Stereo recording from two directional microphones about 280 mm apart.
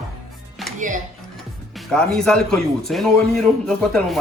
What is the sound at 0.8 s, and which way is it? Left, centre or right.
Speech, right.